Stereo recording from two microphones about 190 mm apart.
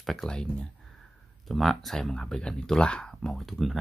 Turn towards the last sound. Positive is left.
turn(degrees=0)  # may be behind; listen again after turning